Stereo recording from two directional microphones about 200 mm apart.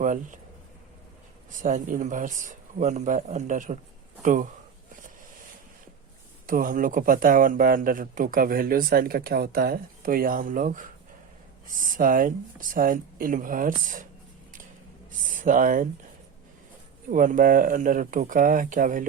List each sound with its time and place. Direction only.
0.0 s speech: 40° right (ahead or behind)
1.6 s speech: 40° right (ahead or behind)
6.5 s speech: 40° right (ahead or behind)
15.3 s speech: 40° right (ahead or behind)
17.1 s speech: 45° right (ahead or behind)